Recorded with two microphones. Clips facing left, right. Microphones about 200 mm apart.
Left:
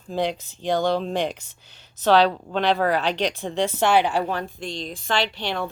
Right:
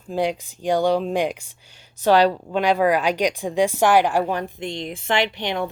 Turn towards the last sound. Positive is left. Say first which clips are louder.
# right 3 dB
turn(degrees=-15)  # may be behind; listen again after turning